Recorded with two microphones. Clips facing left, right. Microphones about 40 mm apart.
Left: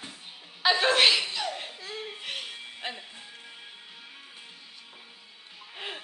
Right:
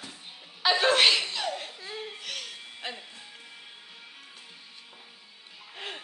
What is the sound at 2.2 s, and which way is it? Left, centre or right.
Music, left.